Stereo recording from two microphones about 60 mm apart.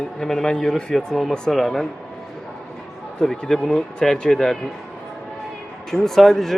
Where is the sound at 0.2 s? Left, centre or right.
Centre.